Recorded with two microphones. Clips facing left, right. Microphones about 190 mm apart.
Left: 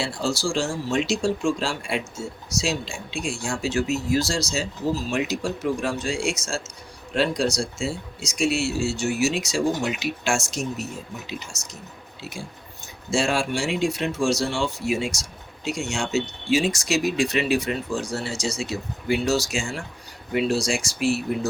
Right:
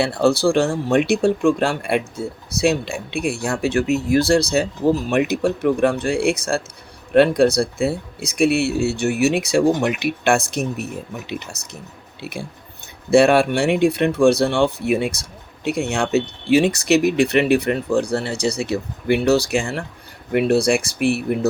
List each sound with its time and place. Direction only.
0.0 s speech: 60° right (ahead or behind)